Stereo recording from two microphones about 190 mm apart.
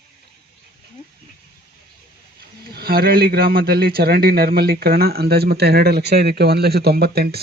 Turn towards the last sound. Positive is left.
turn(degrees=-55)  # may be behind; listen again after turning